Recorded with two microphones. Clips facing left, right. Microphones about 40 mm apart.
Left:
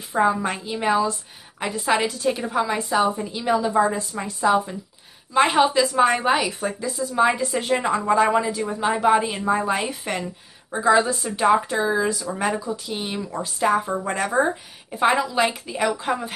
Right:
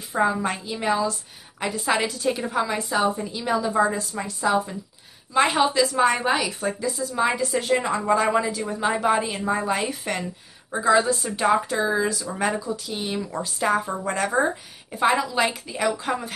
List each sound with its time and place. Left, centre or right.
0.1 s a woman's voice: centre
0.7 s a woman's voice: centre